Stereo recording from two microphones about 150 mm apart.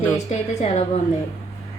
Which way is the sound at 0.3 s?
45° left (ahead or behind).